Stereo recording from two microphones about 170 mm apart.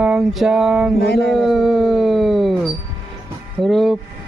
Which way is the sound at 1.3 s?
Centre (ahead or behind).